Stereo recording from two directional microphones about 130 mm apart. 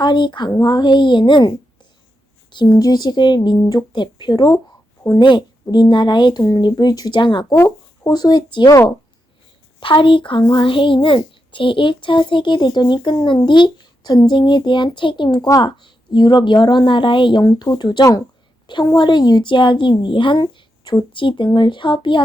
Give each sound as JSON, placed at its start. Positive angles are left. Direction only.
{"t": 0.0, "sound": "a child's voice", "side_deg": 35}
{"t": 7.5, "sound": "shuffling cards", "side_deg": 20}
{"t": 8.1, "sound": "a child's voice", "side_deg": 30}
{"t": 9.8, "sound": "a child's voice", "side_deg": 40}